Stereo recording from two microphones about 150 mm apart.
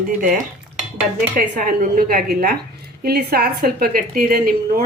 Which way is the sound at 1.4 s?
65° right (ahead or behind).